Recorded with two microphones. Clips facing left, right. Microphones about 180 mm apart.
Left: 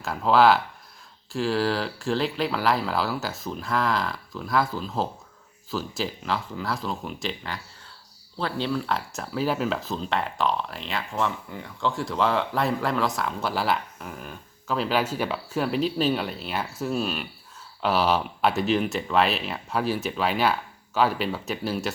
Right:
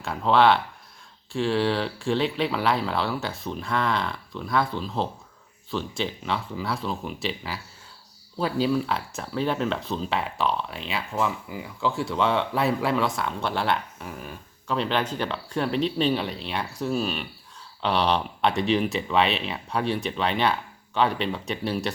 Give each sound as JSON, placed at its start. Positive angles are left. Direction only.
{"t": 0.0, "sound": "speech", "side_deg": 0}